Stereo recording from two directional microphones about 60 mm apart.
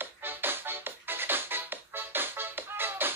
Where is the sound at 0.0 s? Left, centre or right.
Right.